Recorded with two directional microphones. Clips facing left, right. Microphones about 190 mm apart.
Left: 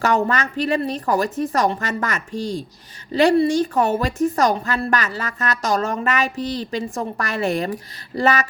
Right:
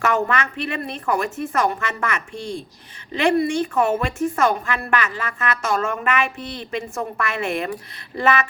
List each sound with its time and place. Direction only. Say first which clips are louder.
0.0 s a woman's voice: left 2 dB; 35° left (ahead or behind)